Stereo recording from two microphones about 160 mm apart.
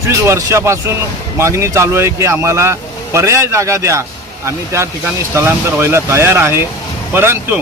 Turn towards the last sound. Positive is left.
turn(degrees=-15)  # may be behind; listen again after turning